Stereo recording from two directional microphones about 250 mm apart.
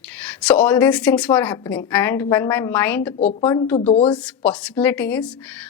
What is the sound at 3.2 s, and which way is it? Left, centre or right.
Speech, left.